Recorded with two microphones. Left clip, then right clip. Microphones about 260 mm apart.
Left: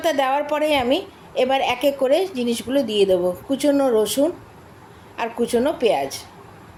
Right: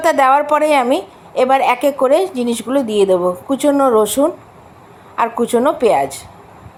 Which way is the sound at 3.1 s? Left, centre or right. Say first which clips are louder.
Right 5 dB; centre.